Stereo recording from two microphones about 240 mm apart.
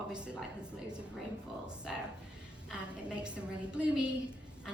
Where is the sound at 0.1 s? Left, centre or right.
Centre.